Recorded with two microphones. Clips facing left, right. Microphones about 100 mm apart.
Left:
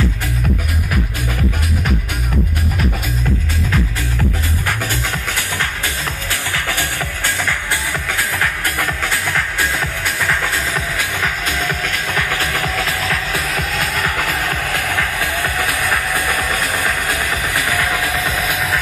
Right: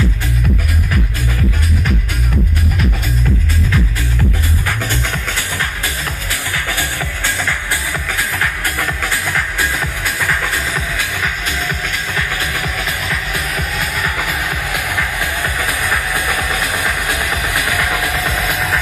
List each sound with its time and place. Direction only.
6.5 s music: 15° right (ahead or behind)
11.2 s music: 45° left (ahead or behind); by 12.6 s 65° left (ahead or behind)
13.7 s music: 5° right (ahead or behind)
17.5 s music: 20° right (ahead or behind)